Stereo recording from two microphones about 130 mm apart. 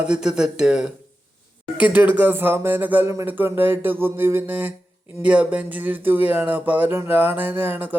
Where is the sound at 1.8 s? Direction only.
15° right (ahead or behind).